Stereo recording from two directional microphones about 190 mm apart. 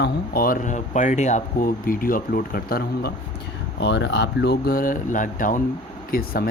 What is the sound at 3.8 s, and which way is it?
Speech, 70° left (ahead or behind).